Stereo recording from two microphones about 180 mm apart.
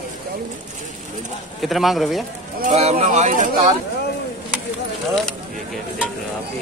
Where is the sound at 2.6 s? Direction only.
35° right (ahead or behind).